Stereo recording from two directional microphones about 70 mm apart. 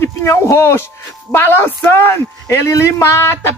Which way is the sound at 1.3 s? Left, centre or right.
Left.